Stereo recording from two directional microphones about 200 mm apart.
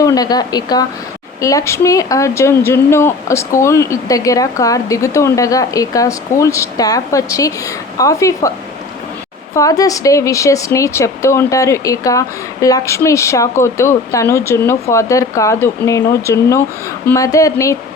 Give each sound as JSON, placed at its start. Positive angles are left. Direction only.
{"t": 0.0, "sound": "speech", "side_deg": 20}
{"t": 9.6, "sound": "speech", "side_deg": 15}